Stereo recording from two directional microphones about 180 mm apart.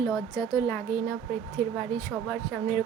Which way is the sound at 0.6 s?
15° left (ahead or behind).